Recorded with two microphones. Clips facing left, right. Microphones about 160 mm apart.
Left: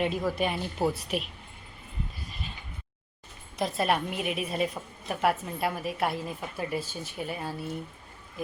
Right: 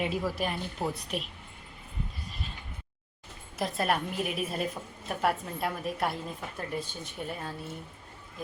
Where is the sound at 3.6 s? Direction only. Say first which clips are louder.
Left 2 dB; centre (ahead or behind).